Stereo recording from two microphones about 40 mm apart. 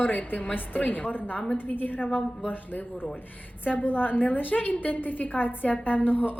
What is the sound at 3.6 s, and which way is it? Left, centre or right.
A woman's voice, left.